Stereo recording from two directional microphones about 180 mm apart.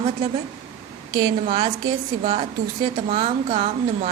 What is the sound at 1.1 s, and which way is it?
A woman's voice, 25° right (ahead or behind).